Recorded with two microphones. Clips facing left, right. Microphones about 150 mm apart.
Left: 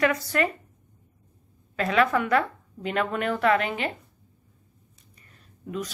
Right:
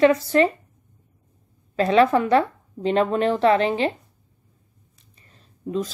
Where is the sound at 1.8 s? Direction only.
30° right (ahead or behind).